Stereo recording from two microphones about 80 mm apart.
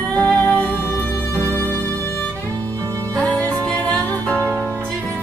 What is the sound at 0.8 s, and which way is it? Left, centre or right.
Music, left.